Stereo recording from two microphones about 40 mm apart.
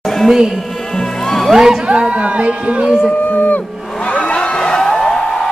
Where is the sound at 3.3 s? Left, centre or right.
Left.